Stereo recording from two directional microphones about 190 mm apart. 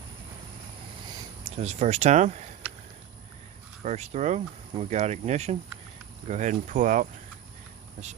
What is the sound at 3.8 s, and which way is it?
Speech, 35° right (ahead or behind).